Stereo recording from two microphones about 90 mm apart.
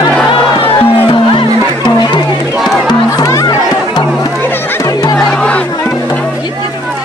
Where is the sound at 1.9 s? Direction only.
50° left (ahead or behind).